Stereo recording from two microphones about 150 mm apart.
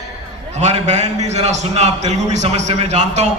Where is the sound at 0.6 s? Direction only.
45° right (ahead or behind).